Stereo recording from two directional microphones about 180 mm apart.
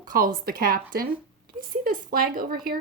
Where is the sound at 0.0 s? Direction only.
50° right (ahead or behind).